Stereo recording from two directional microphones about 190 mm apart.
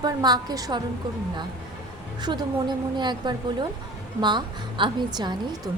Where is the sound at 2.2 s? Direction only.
25° right (ahead or behind).